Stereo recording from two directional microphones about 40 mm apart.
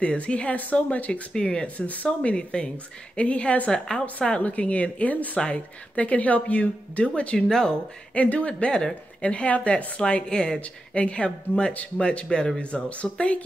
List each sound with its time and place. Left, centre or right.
0.2 s speech: left
1.3 s speech: left
7.4 s speech: centre
8.2 s speech: left; by 10.6 s centre
11.0 s speech: left